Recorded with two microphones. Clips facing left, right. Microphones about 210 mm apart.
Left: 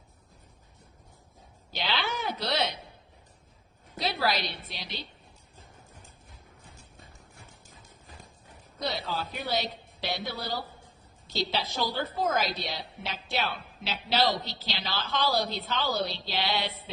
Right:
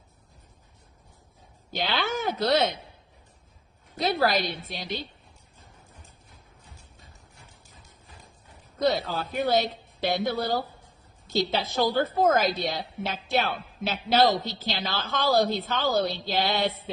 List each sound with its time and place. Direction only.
1.7 s a woman's voice: 50° right (ahead or behind)
3.9 s a woman's voice: 50° right (ahead or behind)
8.8 s a woman's voice: 50° right (ahead or behind)